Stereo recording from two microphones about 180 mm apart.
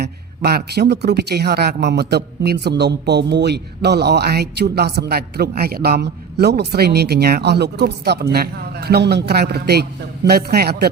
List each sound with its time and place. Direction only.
0.0 s a man's voice: 60° right (ahead or behind)